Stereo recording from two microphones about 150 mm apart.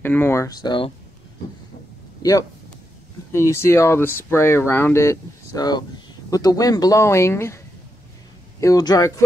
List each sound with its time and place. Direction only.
0.0 s speech: 15° left (ahead or behind)
0.7 s speech: 35° left (ahead or behind)
3.3 s speech: 20° left (ahead or behind)